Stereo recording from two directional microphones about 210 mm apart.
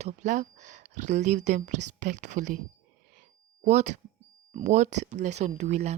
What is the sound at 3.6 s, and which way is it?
Speech, 35° right (ahead or behind).